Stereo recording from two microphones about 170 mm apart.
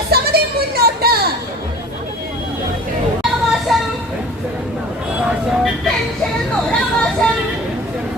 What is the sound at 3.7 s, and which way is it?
Vehicle, centre (ahead or behind).